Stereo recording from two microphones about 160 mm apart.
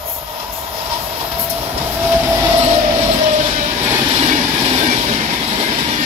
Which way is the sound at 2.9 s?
35° right (ahead or behind).